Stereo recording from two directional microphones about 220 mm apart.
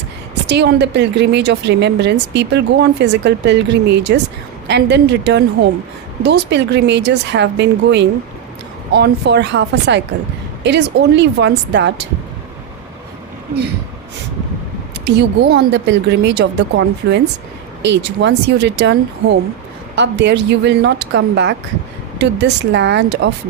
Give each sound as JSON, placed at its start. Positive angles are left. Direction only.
{"t": 0.4, "sound": "a woman's voice", "side_deg": -50}
{"t": 15.0, "sound": "a woman's voice", "side_deg": -50}